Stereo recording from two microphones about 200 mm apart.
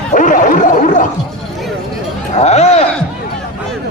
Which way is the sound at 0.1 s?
40° left (ahead or behind).